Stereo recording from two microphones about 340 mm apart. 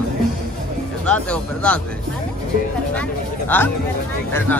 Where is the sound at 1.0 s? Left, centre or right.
Centre.